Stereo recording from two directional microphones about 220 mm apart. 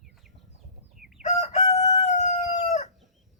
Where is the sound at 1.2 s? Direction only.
30° left (ahead or behind).